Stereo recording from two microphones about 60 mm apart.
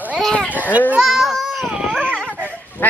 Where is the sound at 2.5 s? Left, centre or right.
Left.